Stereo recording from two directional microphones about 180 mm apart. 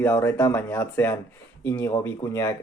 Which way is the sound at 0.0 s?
10° left (ahead or behind).